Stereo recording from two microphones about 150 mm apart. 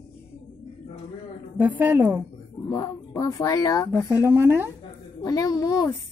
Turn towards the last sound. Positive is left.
turn(degrees=25)  # may be behind; listen again after turning